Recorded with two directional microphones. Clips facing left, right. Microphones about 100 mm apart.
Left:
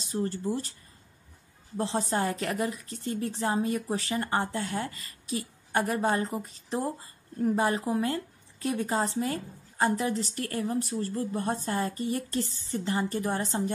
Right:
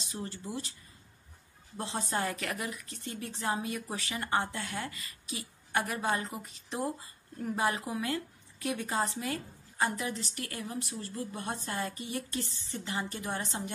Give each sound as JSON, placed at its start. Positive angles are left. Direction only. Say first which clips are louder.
{"t": 0.0, "sound": "speech", "louder": "left 10 dB", "side_deg": 40}
{"t": 1.8, "sound": "speech", "louder": "left 5 dB", "side_deg": 30}